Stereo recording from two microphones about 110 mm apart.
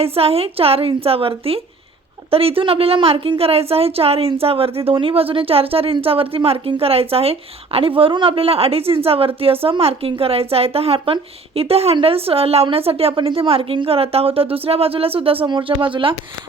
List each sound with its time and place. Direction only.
0.0 s a woman's voice: 65° right (ahead or behind)